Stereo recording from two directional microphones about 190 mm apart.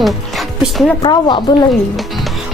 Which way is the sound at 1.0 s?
25° left (ahead or behind).